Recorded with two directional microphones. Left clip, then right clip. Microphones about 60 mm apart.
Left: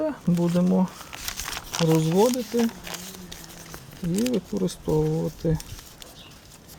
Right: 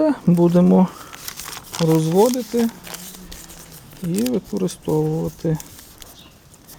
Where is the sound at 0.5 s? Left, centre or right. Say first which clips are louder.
Right 8 dB; right.